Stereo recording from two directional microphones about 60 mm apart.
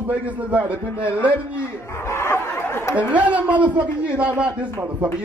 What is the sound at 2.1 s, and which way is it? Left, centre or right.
Chatter, left.